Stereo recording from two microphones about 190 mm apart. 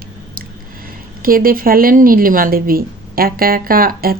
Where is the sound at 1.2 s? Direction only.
50° right (ahead or behind).